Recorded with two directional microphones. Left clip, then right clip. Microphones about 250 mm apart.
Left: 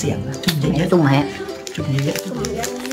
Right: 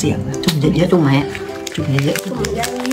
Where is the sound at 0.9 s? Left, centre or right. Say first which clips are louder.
Left 2 dB; centre.